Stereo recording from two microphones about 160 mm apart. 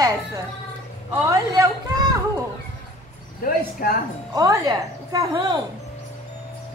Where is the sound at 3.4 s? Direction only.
65° left (ahead or behind).